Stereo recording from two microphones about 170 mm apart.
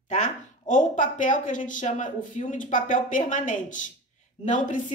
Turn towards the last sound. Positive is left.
turn(degrees=50)  # may be behind; listen again after turning